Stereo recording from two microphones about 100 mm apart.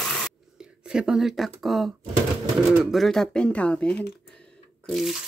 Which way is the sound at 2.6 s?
Centre (ahead or behind).